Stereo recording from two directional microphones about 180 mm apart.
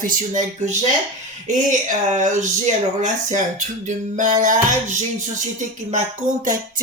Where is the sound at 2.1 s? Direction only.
45° right (ahead or behind).